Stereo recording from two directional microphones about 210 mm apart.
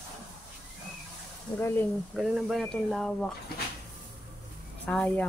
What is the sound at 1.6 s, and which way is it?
Speech, 10° left (ahead or behind).